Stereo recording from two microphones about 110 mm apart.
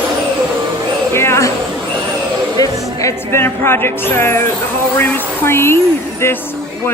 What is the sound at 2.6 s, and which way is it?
Speech, 25° left (ahead or behind).